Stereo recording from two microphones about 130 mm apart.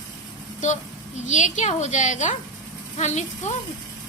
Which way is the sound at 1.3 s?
70° left (ahead or behind).